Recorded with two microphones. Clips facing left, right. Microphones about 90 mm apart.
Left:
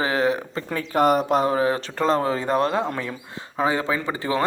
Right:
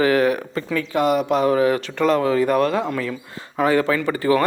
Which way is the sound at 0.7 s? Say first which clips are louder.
Even; 40° left (ahead or behind).